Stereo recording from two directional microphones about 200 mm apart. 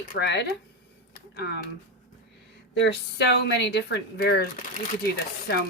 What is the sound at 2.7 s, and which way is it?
A woman's voice, 60° left (ahead or behind).